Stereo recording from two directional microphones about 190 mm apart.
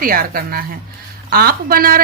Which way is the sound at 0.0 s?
50° right (ahead or behind).